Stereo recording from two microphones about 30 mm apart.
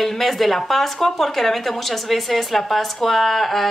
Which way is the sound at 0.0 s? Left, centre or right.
Centre.